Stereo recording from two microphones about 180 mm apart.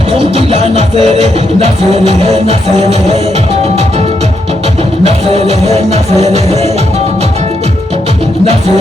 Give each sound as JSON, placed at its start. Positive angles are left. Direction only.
{"t": 0.3, "sound": "music", "side_deg": -35}
{"t": 5.0, "sound": "music", "side_deg": -35}